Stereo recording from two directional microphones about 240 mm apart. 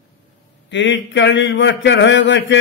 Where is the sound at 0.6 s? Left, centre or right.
Left.